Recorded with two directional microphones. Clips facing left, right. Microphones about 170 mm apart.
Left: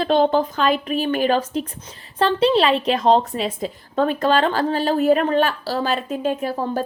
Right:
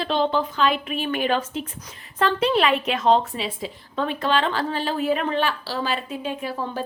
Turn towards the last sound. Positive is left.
turn(degrees=45)  # may be behind; listen again after turning